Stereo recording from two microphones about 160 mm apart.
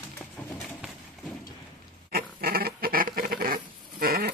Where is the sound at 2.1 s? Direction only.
70° right (ahead or behind).